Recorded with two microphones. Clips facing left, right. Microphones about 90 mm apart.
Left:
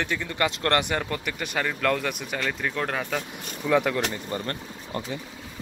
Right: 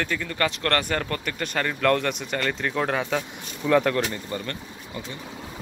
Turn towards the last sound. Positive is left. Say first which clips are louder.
# left 1 dB
turn(degrees=35)  # may be behind; listen again after turning